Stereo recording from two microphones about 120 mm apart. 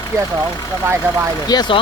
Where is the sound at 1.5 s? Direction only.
35° left (ahead or behind).